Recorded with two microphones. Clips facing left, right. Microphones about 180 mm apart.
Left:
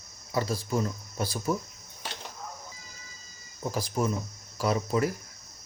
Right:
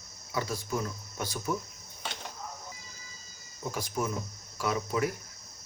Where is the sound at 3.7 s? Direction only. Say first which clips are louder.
Left 4 dB; 35° left (ahead or behind).